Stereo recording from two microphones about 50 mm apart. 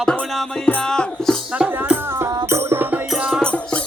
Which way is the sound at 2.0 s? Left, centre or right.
Right.